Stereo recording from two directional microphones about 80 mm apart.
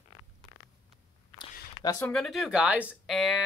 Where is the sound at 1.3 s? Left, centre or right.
Left.